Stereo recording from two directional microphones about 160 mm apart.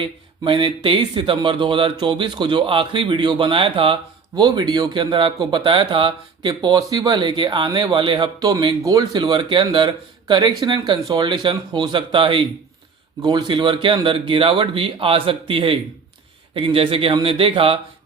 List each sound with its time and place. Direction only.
0.0 s speech: 30° right (ahead or behind)